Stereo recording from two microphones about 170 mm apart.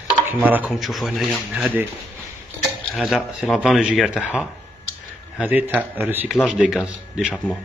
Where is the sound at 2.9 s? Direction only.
Centre (ahead or behind).